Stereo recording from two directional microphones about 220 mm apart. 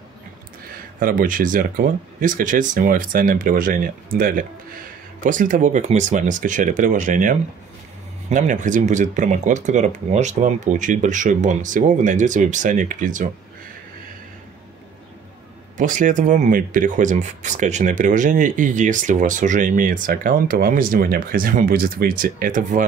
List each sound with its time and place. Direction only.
0.9 s speech: 40° right (ahead or behind)
15.8 s speech: 35° right (ahead or behind)